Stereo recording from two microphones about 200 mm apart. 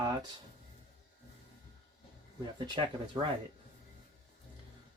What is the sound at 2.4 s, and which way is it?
Speech, 20° right (ahead or behind).